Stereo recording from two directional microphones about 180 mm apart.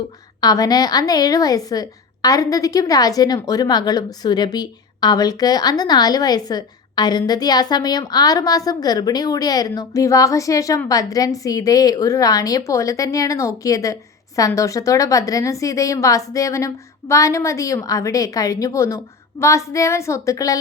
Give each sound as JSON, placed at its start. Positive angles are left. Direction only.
{"t": 0.4, "sound": "a woman's voice", "side_deg": 20}